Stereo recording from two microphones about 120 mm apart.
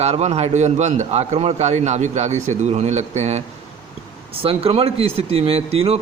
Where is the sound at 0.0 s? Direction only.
65° right (ahead or behind).